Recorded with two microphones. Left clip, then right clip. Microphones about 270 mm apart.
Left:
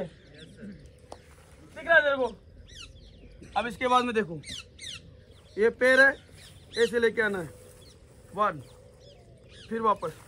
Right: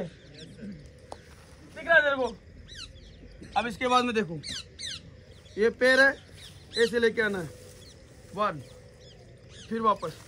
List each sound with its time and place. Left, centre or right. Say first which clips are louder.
0.4 s a sound: right 2 dB; centre
1.8 s a sound: even; centre
3.5 s a man's voice: even; centre
4.4 s squawk: right 4 dB; right
5.6 s a man's voice: left 1 dB; centre
9.7 s a man's voice: even; centre